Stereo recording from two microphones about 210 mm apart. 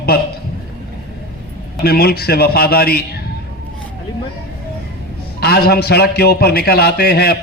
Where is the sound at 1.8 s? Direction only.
50° left (ahead or behind).